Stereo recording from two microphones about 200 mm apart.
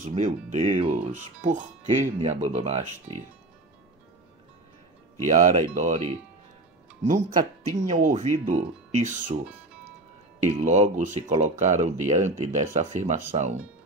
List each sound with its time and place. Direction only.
0.0 s speech: 40° right (ahead or behind)
5.3 s speech: 40° right (ahead or behind)
10.4 s speech: 35° right (ahead or behind)